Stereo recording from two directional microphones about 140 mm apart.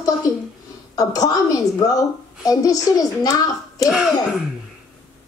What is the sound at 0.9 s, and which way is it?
A child's voice, 25° left (ahead or behind).